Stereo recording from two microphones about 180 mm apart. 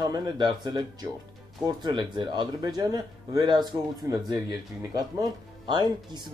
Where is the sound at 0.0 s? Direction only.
25° right (ahead or behind).